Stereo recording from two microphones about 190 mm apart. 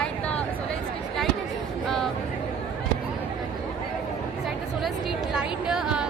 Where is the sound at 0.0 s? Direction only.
5° left (ahead or behind).